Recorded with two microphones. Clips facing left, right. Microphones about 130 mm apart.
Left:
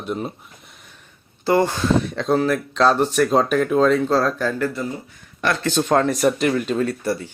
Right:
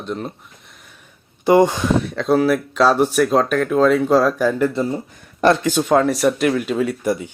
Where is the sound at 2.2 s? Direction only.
5° right (ahead or behind); by 5.0 s 30° right (ahead or behind).